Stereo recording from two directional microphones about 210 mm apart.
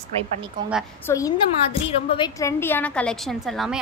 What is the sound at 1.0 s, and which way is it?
A woman's voice, 15° left (ahead or behind).